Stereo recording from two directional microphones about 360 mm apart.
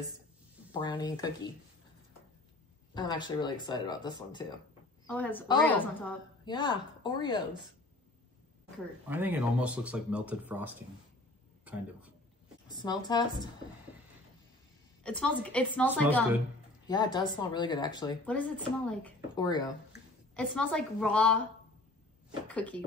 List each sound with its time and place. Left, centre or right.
0.7 s speech: centre
2.9 s speech: centre
9.1 s a man's voice: centre
12.6 s speech: centre
15.0 s speech: centre
22.5 s speech: centre